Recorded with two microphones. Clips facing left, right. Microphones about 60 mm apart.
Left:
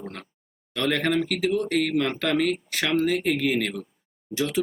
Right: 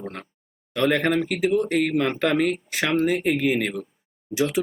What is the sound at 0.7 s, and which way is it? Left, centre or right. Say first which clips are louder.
Speech: right 3 dB; centre.